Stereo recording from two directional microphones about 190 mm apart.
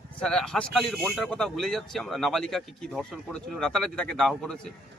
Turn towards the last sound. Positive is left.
turn(degrees=5)  # may be behind; listen again after turning